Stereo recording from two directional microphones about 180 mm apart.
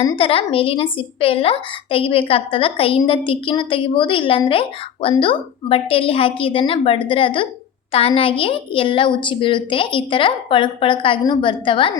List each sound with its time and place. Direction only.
0.0 s a woman's voice: 30° left (ahead or behind)